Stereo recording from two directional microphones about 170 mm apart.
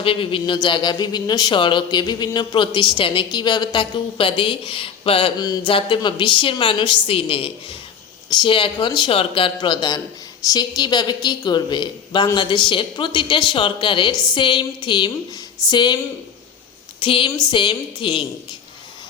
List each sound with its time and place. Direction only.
0.0 s speech: 30° left (ahead or behind)
17.0 s speech: 30° left (ahead or behind)